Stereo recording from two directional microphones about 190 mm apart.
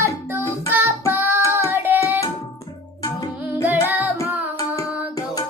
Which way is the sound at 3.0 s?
15° left (ahead or behind).